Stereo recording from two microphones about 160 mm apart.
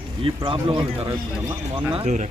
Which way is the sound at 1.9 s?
50° right (ahead or behind).